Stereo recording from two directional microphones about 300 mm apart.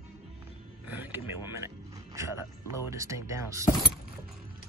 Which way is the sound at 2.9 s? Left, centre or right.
Centre.